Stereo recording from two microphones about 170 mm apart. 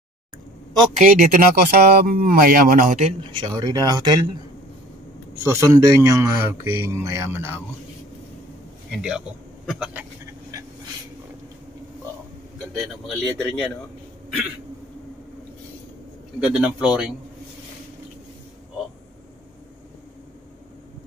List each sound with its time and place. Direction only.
0.9 s speech: 50° right (ahead or behind)
3.3 s speech: 25° right (ahead or behind)
5.4 s speech: 15° right (ahead or behind)
9.7 s a man's voice: 5° right (ahead or behind)
12.7 s a man's voice: centre (ahead or behind)
16.3 s a man's voice: 5° right (ahead or behind)